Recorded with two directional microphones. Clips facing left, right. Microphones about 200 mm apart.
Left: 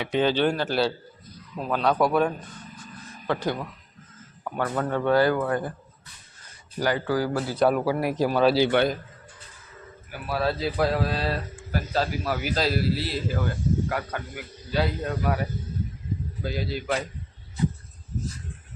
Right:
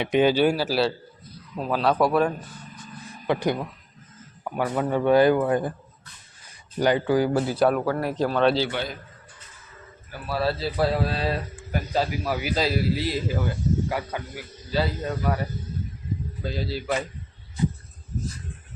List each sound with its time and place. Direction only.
0.0 s a man's voice: 15° right (ahead or behind)
3.2 s a man's voice: 15° right (ahead or behind)
6.7 s speech: 20° right (ahead or behind)
7.5 s speech: centre (ahead or behind)
10.3 s a man's voice: 5° right (ahead or behind)